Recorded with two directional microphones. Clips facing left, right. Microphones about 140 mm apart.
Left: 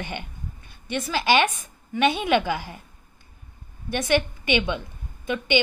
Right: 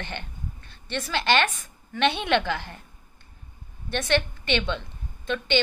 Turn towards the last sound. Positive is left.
turn(degrees=10)  # may be behind; listen again after turning